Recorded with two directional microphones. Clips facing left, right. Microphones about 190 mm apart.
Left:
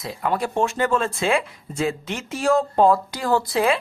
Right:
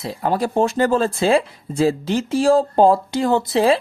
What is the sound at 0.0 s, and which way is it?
Speech, 30° right (ahead or behind).